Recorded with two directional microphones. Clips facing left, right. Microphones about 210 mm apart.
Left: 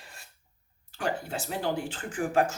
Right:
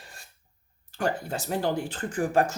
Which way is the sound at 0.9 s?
45° right (ahead or behind).